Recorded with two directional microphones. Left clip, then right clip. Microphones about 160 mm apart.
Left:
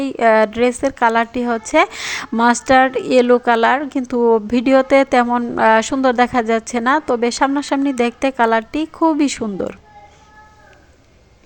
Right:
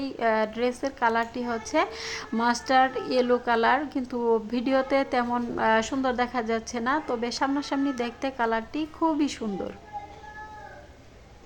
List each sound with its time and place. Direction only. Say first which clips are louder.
0.0 s a woman's voice: left 12 dB; 35° left (ahead or behind)